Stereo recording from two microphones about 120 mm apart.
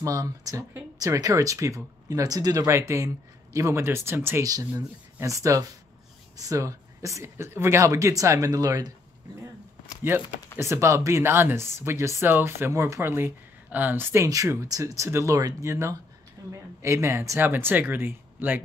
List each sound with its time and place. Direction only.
0.0 s speech: 30° right (ahead or behind)
4.5 s speech: 30° right (ahead or behind)
10.6 s speech: 25° right (ahead or behind)